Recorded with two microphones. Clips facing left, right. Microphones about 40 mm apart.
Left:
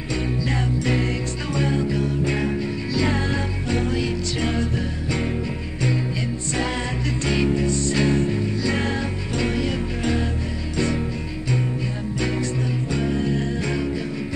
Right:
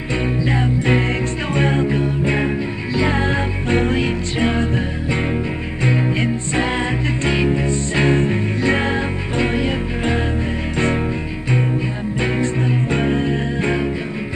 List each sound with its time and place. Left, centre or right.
0.1 s music: right
12.2 s music: right